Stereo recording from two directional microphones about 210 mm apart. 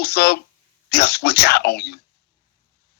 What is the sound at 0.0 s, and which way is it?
A man's voice, 50° left (ahead or behind).